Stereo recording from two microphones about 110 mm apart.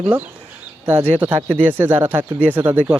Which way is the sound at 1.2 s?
15° right (ahead or behind).